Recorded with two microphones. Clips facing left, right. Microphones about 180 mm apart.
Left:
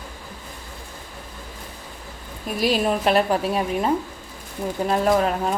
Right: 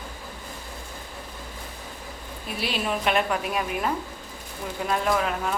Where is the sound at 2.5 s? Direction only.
40° left (ahead or behind).